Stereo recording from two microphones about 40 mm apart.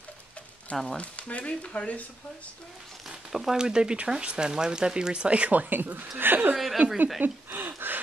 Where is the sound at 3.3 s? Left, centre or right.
Centre.